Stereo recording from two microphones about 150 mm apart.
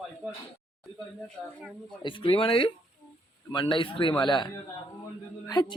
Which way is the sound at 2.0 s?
35° left (ahead or behind).